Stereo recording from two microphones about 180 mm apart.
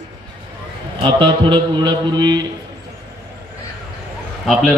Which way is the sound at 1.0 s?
30° right (ahead or behind).